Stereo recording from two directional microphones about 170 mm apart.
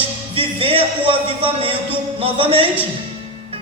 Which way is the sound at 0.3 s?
30° right (ahead or behind).